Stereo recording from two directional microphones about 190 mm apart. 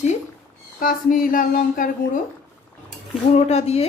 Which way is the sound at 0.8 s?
45° left (ahead or behind).